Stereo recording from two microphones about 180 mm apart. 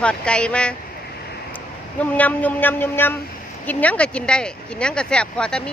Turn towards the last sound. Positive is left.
turn(degrees=5)  # may be behind; listen again after turning